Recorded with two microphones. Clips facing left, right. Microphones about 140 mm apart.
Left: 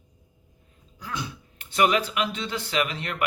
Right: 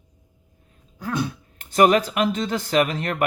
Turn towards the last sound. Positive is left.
turn(degrees=-45)  # may be behind; listen again after turning